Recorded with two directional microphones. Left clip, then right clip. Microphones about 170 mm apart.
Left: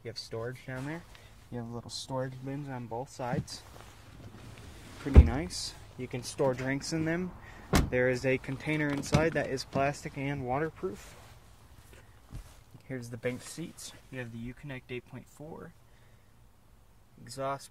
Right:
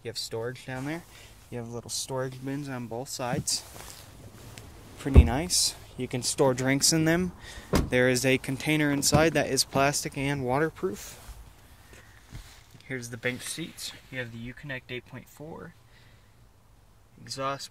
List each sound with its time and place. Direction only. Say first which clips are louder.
0.0 s speech: right 5 dB; 30° right (ahead or behind)
5.0 s speech: right 4 dB; 25° right (ahead or behind); by 11.0 s 50° right (ahead or behind)
12.8 s speech: right 4 dB; centre (ahead or behind)
14.6 s speech: right 6 dB; 20° right (ahead or behind)